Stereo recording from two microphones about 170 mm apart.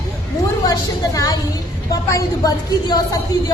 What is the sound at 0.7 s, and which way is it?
A woman's voice, 20° left (ahead or behind).